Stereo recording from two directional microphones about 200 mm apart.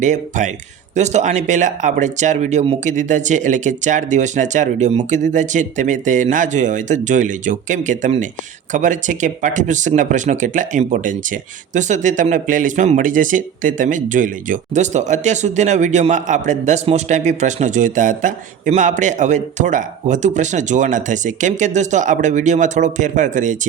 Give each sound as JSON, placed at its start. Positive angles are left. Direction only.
{"t": 0.0, "sound": "speech", "side_deg": -40}